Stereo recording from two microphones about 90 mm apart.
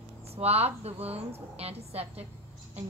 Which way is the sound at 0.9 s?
90° right.